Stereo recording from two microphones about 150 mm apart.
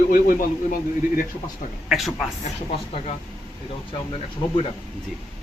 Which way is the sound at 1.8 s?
Centre (ahead or behind).